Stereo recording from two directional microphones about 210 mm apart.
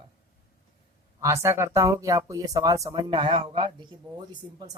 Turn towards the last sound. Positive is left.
turn(degrees=-20)  # may be behind; listen again after turning